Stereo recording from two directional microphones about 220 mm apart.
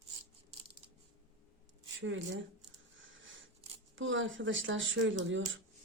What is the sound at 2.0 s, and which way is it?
Speech, 60° right (ahead or behind).